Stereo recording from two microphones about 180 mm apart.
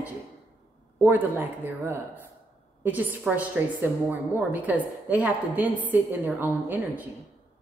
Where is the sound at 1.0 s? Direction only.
10° right (ahead or behind).